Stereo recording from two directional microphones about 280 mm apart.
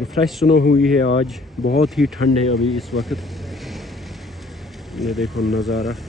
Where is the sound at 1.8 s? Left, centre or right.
Centre.